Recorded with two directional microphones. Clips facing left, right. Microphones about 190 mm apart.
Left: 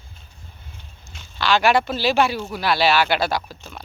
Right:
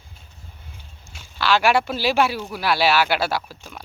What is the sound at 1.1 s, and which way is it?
Speech, 5° right (ahead or behind).